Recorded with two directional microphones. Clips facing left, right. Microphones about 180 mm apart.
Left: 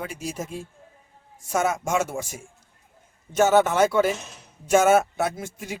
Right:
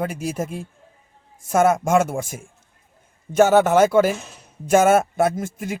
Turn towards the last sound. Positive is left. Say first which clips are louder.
# right 6 dB
turn(degrees=-50)  # may be behind; listen again after turning